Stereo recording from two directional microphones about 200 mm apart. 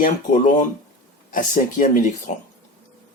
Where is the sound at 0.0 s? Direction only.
40° left (ahead or behind).